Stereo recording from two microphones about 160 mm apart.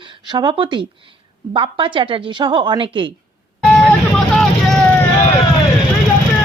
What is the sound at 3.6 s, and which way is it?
Vehicle, 5° left (ahead or behind).